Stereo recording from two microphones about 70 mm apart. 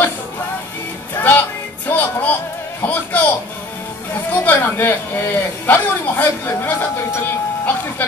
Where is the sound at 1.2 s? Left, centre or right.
Left.